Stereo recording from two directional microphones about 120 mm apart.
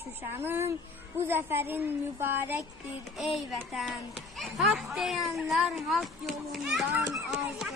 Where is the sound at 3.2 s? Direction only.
Centre (ahead or behind).